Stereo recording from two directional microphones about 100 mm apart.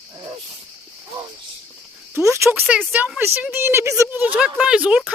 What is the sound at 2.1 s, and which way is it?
A woman's voice, 30° right (ahead or behind).